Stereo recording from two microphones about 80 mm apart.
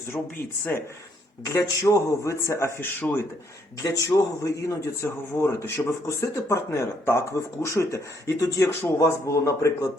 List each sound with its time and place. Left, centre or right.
1.5 s speech: left
3.0 s speech: centre
3.8 s speech: left
5.4 s speech: left